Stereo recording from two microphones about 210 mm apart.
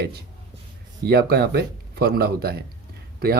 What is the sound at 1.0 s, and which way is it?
Speech, 50° right (ahead or behind).